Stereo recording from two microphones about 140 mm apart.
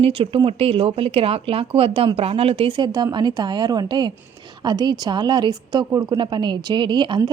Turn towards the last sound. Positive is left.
turn(degrees=-35)  # may be behind; listen again after turning